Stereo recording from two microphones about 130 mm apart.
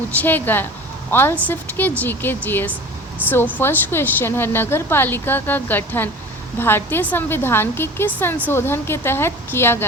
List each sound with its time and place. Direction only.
0.2 s a woman's voice: 15° left (ahead or behind)